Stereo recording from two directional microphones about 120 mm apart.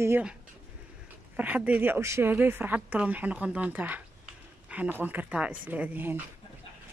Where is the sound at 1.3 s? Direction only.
15° right (ahead or behind).